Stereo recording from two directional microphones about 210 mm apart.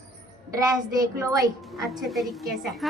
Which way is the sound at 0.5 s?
15° right (ahead or behind).